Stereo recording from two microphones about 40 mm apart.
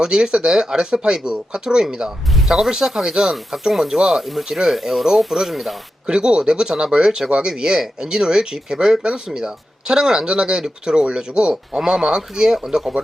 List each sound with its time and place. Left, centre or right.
0.0 s speech: centre
6.1 s speech: right